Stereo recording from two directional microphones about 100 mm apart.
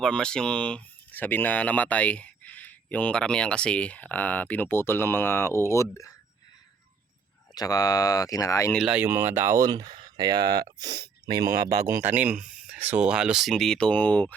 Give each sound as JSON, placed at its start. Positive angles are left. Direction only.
{"t": 0.0, "sound": "speech", "side_deg": 5}
{"t": 7.5, "sound": "speech", "side_deg": 40}
{"t": 8.8, "sound": "speech", "side_deg": -10}
{"t": 9.0, "sound": "speech", "side_deg": -20}
{"t": 9.6, "sound": "speech", "side_deg": -45}
{"t": 12.0, "sound": "speech", "side_deg": -15}